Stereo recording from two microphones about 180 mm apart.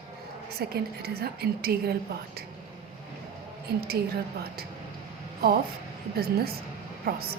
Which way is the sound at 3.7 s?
60° right (ahead or behind).